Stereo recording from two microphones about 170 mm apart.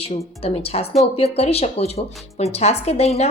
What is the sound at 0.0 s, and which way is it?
A woman's voice, 35° left (ahead or behind).